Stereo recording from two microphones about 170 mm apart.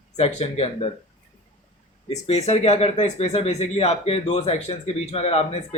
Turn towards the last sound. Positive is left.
turn(degrees=35)  # may be behind; listen again after turning